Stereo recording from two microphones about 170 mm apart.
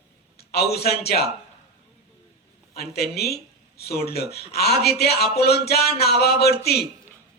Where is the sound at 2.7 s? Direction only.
70° left (ahead or behind).